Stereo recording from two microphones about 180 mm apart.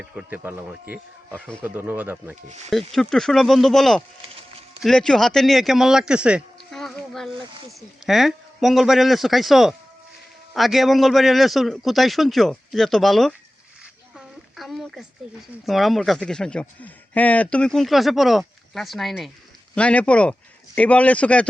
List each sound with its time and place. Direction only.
0.0 s speech: 5° right (ahead or behind)
2.6 s speech: centre (ahead or behind)
14.2 s a sound: centre (ahead or behind)
15.6 s speech: centre (ahead or behind)